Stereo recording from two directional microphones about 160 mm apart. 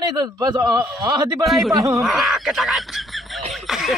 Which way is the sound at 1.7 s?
20° right (ahead or behind).